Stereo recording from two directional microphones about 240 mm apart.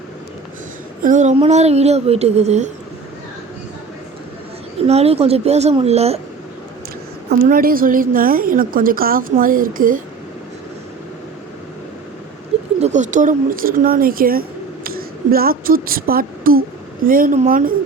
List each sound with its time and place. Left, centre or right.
1.0 s speech: right
4.9 s speech: right
7.3 s a woman's voice: right
12.8 s a woman's voice: right